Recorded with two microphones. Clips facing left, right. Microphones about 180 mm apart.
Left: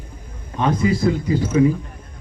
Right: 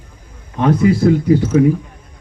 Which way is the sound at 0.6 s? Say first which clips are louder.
Right 6 dB; 60° right (ahead or behind).